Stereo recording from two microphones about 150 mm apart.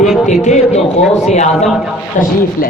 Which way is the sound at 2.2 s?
60° left (ahead or behind).